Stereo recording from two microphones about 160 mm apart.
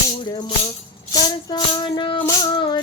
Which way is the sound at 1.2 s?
30° left (ahead or behind).